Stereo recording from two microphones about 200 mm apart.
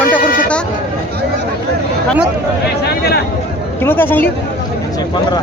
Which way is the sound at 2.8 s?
55° left (ahead or behind).